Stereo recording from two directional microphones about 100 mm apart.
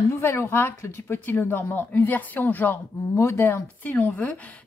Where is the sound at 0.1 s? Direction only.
25° left (ahead or behind).